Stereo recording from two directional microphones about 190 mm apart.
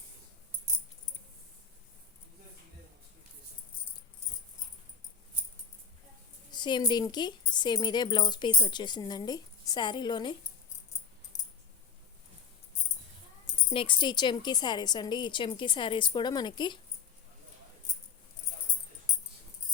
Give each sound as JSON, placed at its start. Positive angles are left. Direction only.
{"t": 6.5, "sound": "speech", "side_deg": 25}
{"t": 11.3, "sound": "a sound", "side_deg": 40}
{"t": 13.7, "sound": "speech", "side_deg": 25}